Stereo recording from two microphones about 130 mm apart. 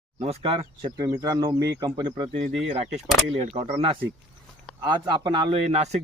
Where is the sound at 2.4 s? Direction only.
50° right (ahead or behind).